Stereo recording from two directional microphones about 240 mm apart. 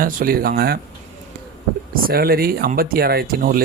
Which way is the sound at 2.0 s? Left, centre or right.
Right.